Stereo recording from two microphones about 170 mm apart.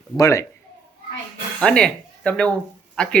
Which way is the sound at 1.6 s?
5° left (ahead or behind).